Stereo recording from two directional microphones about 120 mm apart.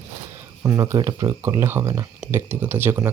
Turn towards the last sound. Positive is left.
turn(degrees=-20)  # may be behind; listen again after turning